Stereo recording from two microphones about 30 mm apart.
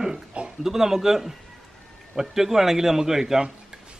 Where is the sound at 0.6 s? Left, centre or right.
Centre.